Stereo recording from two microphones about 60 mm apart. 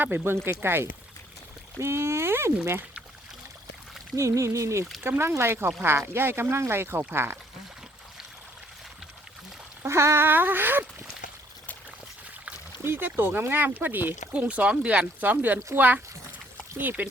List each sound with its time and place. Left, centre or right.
0.0 s speech: right
4.1 s speech: right
5.0 s speech: right
9.8 s speech: right
10.2 s speech: right
12.8 s speech: right
14.3 s speech: right
17.0 s speech: right